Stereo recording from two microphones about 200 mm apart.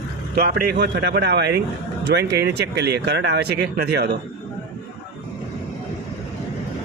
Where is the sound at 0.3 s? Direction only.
50° right (ahead or behind).